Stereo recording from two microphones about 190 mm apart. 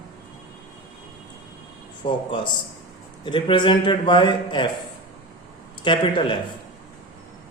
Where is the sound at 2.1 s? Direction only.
25° left (ahead or behind).